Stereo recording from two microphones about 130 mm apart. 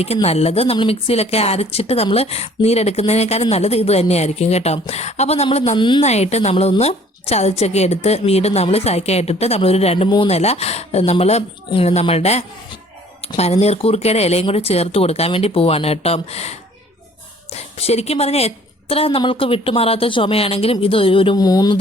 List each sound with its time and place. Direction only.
0.0 s a woman's voice: 50° left (ahead or behind)
5.7 s a woman's voice: 35° left (ahead or behind)
6.0 s a woman's voice: 60° left (ahead or behind)
21.3 s a sound: 30° left (ahead or behind)